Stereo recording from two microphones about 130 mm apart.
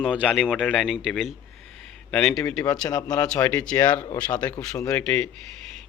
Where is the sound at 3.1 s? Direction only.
10° left (ahead or behind).